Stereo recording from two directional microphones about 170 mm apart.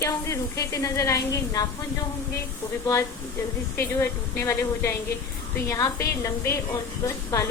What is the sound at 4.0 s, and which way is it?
A woman's voice, 15° left (ahead or behind).